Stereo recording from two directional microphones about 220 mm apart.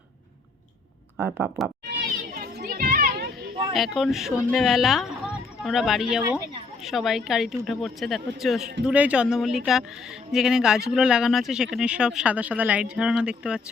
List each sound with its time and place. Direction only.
1.1 s speech: 5° right (ahead or behind)
2.0 s children playing: 40° right (ahead or behind)
3.8 s speech: centre (ahead or behind)